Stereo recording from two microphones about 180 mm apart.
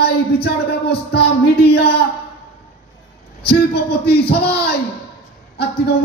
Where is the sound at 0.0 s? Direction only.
60° left (ahead or behind).